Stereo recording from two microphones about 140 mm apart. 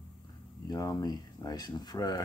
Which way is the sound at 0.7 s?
25° left (ahead or behind).